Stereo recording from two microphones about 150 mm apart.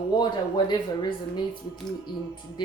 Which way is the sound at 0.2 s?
30° left (ahead or behind).